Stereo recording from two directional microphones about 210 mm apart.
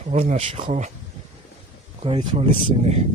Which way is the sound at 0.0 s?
30° right (ahead or behind).